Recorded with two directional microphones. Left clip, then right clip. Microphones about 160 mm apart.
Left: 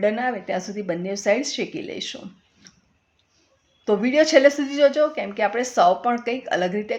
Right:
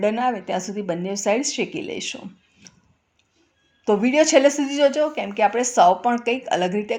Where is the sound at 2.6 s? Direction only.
20° right (ahead or behind).